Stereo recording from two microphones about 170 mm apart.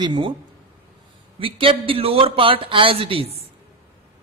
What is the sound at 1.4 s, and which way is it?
A man's voice, 30° right (ahead or behind).